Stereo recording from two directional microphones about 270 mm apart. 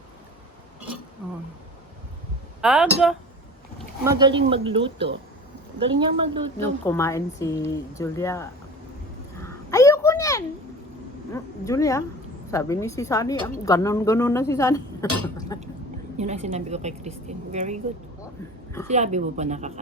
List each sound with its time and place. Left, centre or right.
2.6 s speech: centre
4.0 s a woman's voice: centre
6.6 s a woman's voice: centre
9.4 s a sound: centre
11.3 s a woman's voice: centre
16.1 s a woman's voice: right
18.9 s a woman's voice: right